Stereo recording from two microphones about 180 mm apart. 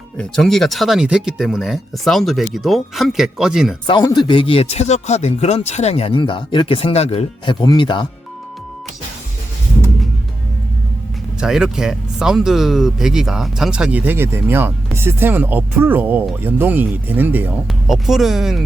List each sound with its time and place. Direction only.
0.2 s speech: centre (ahead or behind)
3.8 s speech: 25° left (ahead or behind)
11.3 s speech: 5° right (ahead or behind)